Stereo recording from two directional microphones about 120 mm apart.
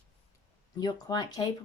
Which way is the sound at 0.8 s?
35° left (ahead or behind).